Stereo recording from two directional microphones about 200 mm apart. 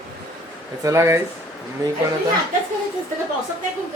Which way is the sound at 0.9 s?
15° right (ahead or behind).